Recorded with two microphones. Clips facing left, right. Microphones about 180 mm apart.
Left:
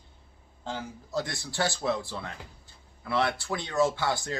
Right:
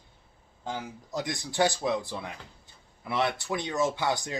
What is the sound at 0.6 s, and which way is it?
Speech, 15° right (ahead or behind).